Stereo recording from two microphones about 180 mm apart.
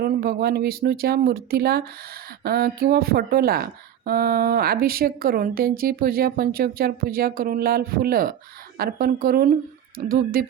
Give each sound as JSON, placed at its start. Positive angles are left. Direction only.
{"t": 0.0, "sound": "a woman's voice", "side_deg": -55}